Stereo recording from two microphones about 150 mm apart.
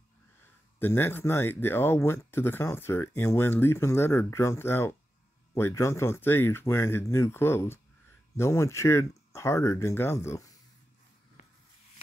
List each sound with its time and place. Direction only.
0.7 s speech: 15° left (ahead or behind)